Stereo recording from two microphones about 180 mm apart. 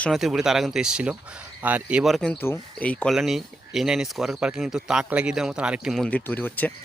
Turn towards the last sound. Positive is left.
turn(degrees=10)  # may be behind; listen again after turning